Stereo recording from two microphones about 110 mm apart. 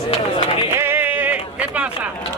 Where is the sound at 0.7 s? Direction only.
20° right (ahead or behind).